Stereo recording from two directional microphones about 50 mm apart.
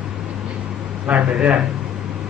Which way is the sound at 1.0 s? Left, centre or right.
Right.